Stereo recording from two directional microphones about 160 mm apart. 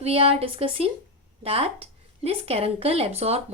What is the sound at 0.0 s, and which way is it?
A woman's voice, 40° right (ahead or behind).